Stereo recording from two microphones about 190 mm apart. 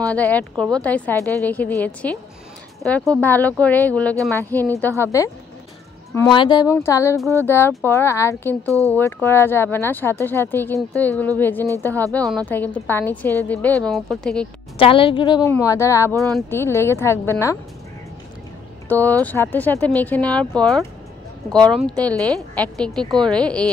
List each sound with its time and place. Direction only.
0.1 s speech: 5° left (ahead or behind)
8.6 s speech: 15° right (ahead or behind)
8.9 s speech: 15° left (ahead or behind)
14.8 s a woman's voice: 30° left (ahead or behind)
18.9 s speech: 10° left (ahead or behind)
21.5 s speech: 25° right (ahead or behind)
21.8 s speech: 5° left (ahead or behind)